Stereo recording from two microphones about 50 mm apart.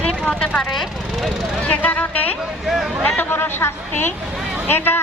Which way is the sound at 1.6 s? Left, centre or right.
Left.